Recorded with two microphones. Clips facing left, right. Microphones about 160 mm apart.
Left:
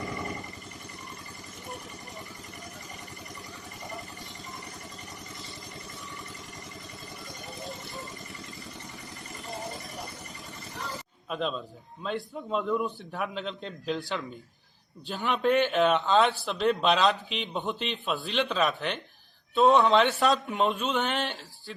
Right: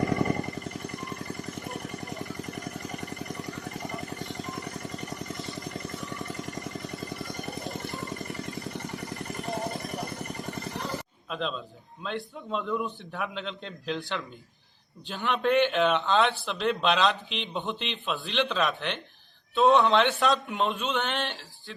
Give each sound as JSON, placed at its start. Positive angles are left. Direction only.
{"t": 0.0, "sound": "vehicle", "side_deg": -60}
{"t": 3.3, "sound": "vehicle", "side_deg": -70}
{"t": 5.5, "sound": "vehicle", "side_deg": -50}
{"t": 6.0, "sound": "vehicle", "side_deg": -70}
{"t": 11.3, "sound": "a man's voice", "side_deg": 5}